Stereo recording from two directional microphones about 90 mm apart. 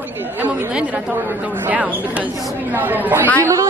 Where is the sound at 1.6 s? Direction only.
15° right (ahead or behind).